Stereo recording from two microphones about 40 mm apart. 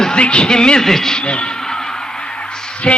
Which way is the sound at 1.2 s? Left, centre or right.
Left.